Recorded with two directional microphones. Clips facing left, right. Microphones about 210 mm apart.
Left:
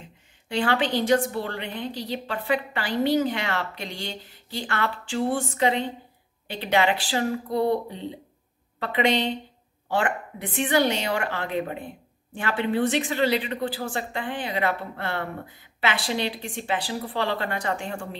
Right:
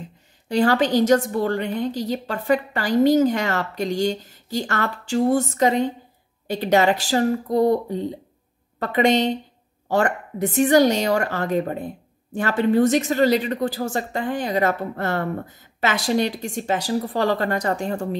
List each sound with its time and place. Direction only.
0.0 s speech: 40° right (ahead or behind)